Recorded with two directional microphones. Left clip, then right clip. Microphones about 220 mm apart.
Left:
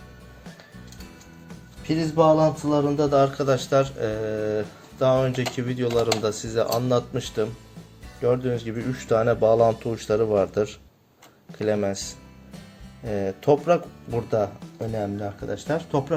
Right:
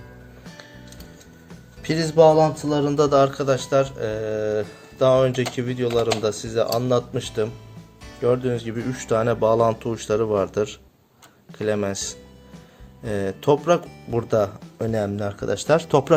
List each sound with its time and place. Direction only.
1.8 s speech: 30° right (ahead or behind)
3.1 s speech: 15° right (ahead or behind)
3.3 s speech: centre (ahead or behind); by 16.1 s 45° right (ahead or behind)